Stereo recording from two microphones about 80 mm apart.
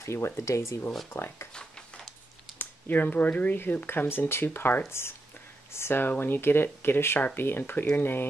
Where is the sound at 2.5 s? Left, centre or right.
Left.